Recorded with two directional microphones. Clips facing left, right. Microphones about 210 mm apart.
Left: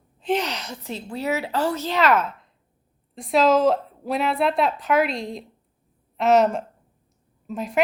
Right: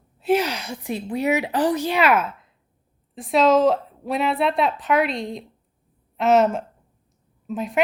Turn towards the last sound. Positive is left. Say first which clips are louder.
# right 1 dB
turn(degrees=0)  # may be behind; listen again after turning